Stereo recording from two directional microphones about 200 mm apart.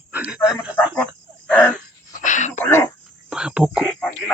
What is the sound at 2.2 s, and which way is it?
Throat clearing, 40° left (ahead or behind).